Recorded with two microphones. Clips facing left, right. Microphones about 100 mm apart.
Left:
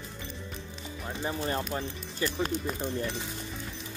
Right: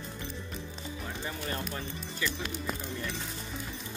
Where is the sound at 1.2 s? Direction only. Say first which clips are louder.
Left 7 dB; 30° left (ahead or behind).